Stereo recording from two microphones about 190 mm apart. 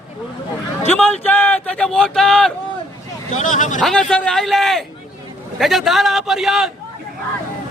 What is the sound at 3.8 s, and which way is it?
Speech, 5° left (ahead or behind).